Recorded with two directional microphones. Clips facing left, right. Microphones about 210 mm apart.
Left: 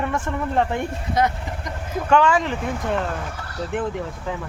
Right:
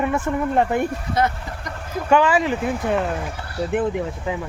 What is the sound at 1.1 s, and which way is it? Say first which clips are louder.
Speech: left 4 dB; 15° left (ahead or behind).